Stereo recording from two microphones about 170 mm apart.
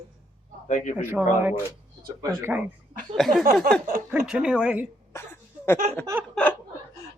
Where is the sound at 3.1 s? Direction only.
Centre (ahead or behind).